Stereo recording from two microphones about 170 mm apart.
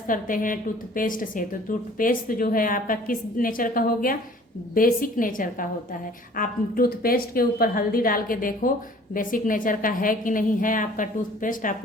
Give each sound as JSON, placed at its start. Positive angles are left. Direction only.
{"t": 0.1, "sound": "a woman's voice", "side_deg": 50}